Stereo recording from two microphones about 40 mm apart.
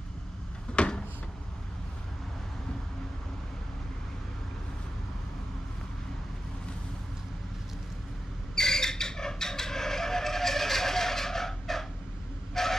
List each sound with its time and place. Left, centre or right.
0.7 s a sound: left
8.5 s chicken: centre
12.6 s train: centre